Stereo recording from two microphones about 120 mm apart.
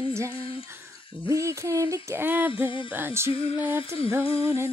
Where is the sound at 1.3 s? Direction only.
25° right (ahead or behind).